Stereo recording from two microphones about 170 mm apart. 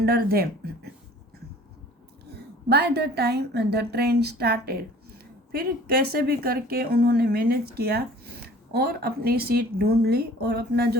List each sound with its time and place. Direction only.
0.0 s speech: 65° right (ahead or behind)
2.3 s a woman's voice: 70° right (ahead or behind)